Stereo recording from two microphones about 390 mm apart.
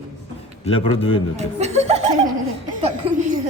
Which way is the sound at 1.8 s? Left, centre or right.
Centre.